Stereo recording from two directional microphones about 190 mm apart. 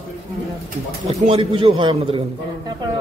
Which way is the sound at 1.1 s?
30° right (ahead or behind).